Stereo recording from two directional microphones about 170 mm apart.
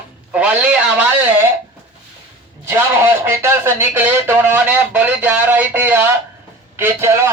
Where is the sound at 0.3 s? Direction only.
5° right (ahead or behind).